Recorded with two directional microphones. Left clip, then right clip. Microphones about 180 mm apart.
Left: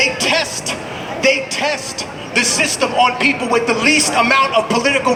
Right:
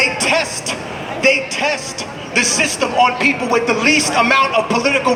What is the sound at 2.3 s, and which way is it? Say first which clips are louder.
Speech: even; 15° left (ahead or behind).